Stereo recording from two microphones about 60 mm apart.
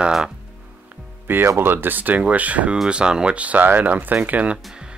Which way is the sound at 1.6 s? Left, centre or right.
Right.